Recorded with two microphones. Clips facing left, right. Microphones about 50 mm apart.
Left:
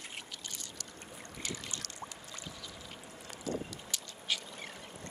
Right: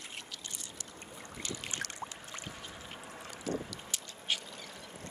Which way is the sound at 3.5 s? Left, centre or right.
Right.